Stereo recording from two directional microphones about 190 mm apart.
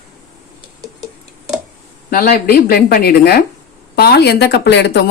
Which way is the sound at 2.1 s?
50° left (ahead or behind).